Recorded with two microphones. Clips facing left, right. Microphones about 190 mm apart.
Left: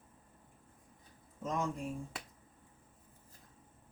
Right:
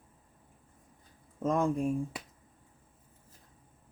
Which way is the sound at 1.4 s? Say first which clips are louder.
Right 8 dB; 55° right (ahead or behind).